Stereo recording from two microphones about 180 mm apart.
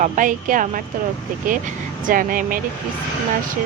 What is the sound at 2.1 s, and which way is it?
Speech, 50° right (ahead or behind).